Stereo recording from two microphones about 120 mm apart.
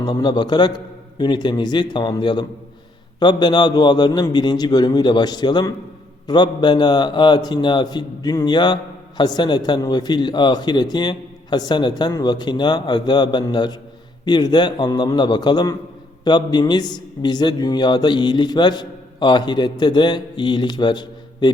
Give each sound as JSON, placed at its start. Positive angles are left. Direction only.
{"t": 0.0, "sound": "a man's voice", "side_deg": 40}